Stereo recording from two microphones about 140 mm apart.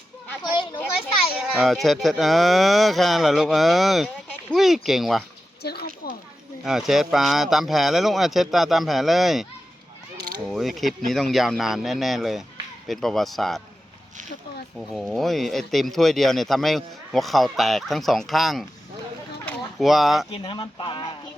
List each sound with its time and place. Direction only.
1.3 s speech: 5° right (ahead or behind)
6.0 s a sound: 90° left
6.7 s speech: 5° right (ahead or behind)
14.8 s speech: centre (ahead or behind)
19.8 s speech: centre (ahead or behind)
20.3 s speech: 35° left (ahead or behind)